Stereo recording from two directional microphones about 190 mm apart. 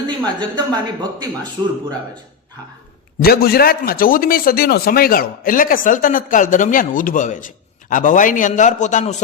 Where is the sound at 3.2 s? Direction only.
55° left (ahead or behind).